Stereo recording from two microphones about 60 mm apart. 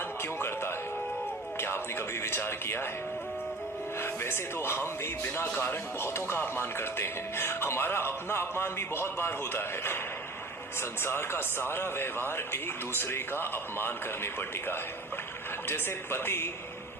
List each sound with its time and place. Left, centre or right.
0.2 s music: left
1.5 s speech: left
4.0 s speech: left